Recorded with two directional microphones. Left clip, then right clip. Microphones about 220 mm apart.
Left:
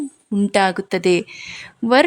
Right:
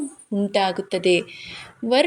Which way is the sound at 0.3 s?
30° left (ahead or behind).